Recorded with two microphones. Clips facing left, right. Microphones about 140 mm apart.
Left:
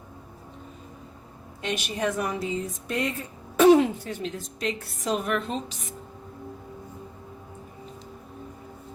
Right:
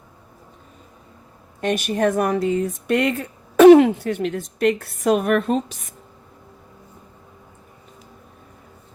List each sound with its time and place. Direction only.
1.6 s speech: 50° right (ahead or behind)